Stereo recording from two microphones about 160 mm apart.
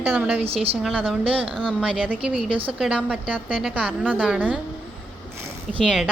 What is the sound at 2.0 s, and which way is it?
Speech, 10° right (ahead or behind).